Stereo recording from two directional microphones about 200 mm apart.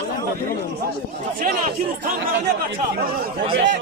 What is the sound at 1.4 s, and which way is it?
Speech, 45° right (ahead or behind).